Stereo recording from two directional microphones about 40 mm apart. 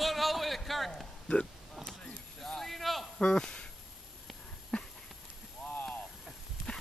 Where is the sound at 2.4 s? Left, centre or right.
Centre.